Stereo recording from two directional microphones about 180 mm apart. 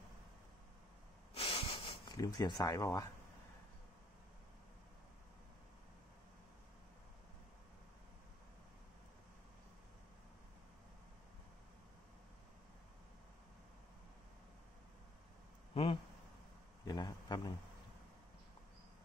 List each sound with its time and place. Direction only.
1.3 s hiss: 35° left (ahead or behind)
2.0 s speech: 20° left (ahead or behind)
15.7 s a sound: 30° left (ahead or behind)